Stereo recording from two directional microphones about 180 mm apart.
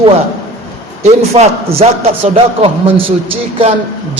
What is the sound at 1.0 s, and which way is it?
A man's voice, 35° right (ahead or behind).